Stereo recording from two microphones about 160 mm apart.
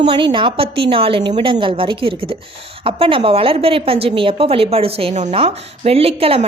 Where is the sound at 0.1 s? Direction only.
30° right (ahead or behind).